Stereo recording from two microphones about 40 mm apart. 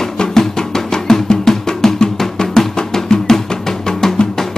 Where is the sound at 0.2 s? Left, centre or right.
Centre.